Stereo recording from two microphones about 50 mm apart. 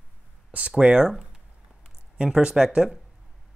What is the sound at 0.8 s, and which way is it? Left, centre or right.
Speech, centre.